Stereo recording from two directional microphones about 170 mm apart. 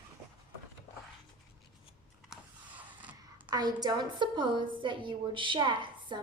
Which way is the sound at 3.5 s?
25° right (ahead or behind).